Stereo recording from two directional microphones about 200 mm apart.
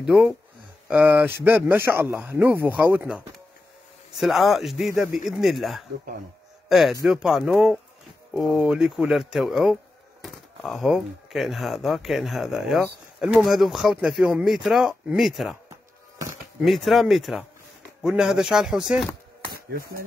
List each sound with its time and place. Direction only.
0.0 s speech: centre (ahead or behind)
16.6 s speech: centre (ahead or behind)
19.5 s speech: 50° right (ahead or behind)